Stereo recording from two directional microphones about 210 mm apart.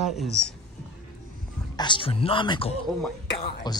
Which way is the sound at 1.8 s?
25° left (ahead or behind).